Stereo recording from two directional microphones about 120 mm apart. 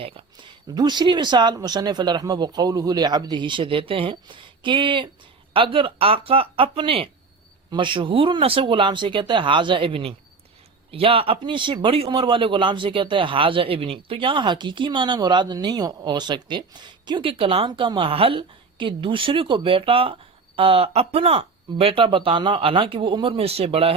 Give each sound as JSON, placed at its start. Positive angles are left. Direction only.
{"t": 0.0, "sound": "a man's voice", "side_deg": -50}